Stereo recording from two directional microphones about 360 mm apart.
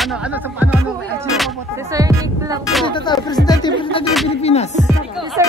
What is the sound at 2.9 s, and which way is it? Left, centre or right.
Speech, centre.